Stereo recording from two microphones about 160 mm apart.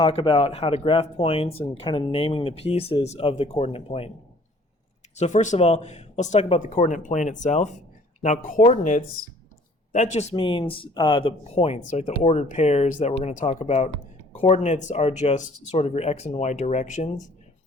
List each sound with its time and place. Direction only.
0.0 s speech: 35° left (ahead or behind)
5.1 s speech: 45° left (ahead or behind)
10.4 s speech: 35° left (ahead or behind); by 17.2 s 50° left (ahead or behind)